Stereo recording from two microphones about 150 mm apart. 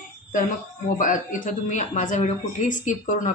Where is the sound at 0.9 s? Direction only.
65° left (ahead or behind).